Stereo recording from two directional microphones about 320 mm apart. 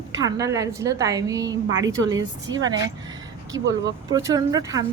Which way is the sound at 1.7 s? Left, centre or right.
Right.